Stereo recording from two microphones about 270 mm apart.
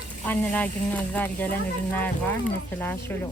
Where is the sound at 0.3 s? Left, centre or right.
Centre.